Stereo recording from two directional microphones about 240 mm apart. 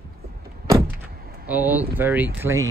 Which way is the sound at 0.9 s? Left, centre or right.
Right.